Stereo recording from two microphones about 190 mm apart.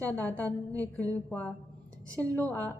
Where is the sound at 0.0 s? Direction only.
10° left (ahead or behind).